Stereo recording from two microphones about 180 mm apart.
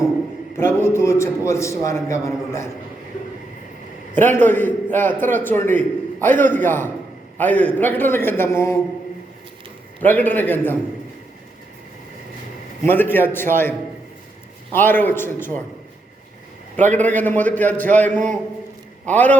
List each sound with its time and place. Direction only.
0.5 s a man's voice: 15° left (ahead or behind)
4.2 s a man's voice: 10° left (ahead or behind)
10.0 s a man's voice: 10° left (ahead or behind)
12.8 s a man's voice: 10° left (ahead or behind)
16.7 s a man's voice: 10° left (ahead or behind)